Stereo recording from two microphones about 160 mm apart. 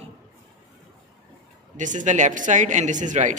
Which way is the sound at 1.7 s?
50° right (ahead or behind).